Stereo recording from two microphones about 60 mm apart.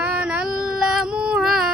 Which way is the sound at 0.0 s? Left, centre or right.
Centre.